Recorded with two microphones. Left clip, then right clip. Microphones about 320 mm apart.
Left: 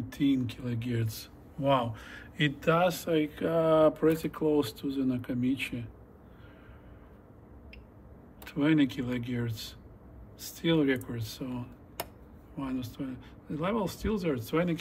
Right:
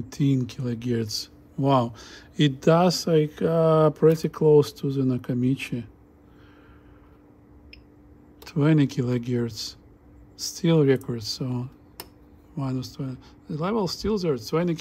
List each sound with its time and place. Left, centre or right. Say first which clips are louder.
0.1 s speech: right 3 dB; right
8.5 s speech: right 4 dB; right